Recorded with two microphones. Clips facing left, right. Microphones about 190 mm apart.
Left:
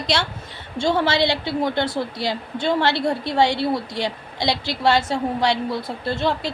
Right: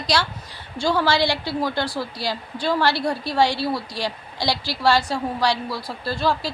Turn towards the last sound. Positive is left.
turn(degrees=25)  # may be behind; listen again after turning